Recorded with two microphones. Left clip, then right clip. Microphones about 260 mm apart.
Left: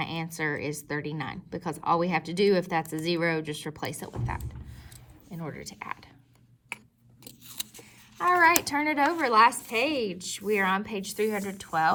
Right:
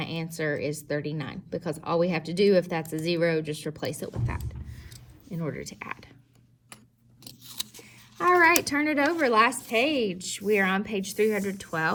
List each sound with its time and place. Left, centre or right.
0.0 s a woman's voice: left
5.3 s speech: centre
7.3 s a sound: centre
8.6 s speech: centre